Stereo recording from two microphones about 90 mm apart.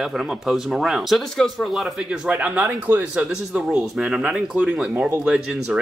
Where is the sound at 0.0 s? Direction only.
5° right (ahead or behind).